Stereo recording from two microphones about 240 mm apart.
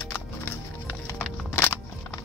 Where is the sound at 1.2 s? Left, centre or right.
Centre.